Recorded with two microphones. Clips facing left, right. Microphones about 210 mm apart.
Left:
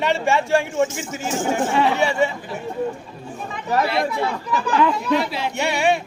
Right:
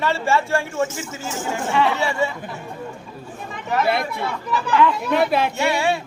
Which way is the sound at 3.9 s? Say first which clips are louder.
Even; 55° right (ahead or behind).